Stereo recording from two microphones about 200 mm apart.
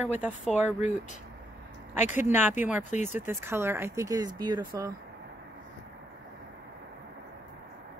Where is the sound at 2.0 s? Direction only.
40° left (ahead or behind).